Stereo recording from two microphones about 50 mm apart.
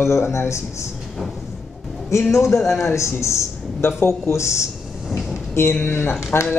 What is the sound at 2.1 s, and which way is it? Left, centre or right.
A man's voice, left.